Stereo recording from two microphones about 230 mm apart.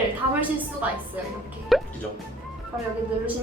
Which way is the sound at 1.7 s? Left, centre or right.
Centre.